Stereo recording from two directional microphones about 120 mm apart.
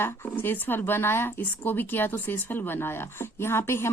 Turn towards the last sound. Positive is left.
turn(degrees=20)  # may be behind; listen again after turning